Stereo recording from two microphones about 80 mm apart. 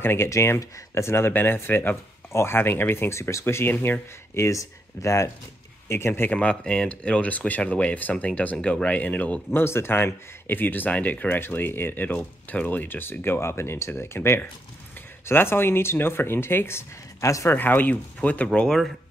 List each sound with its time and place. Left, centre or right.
0.0 s speech: left
4.5 s speech: left
17.6 s speech: left